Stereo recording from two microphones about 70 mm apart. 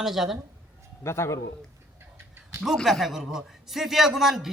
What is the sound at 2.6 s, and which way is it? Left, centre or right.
A man's voice, centre.